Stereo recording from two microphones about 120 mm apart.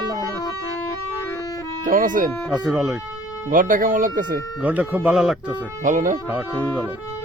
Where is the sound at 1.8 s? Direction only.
90° right.